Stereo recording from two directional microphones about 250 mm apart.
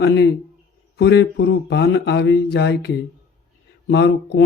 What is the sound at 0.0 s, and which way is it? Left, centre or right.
Speech, left.